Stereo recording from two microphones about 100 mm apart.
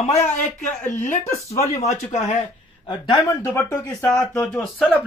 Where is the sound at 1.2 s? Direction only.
30° left (ahead or behind).